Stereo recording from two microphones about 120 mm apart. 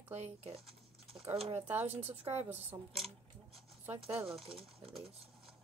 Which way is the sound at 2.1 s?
60° right (ahead or behind).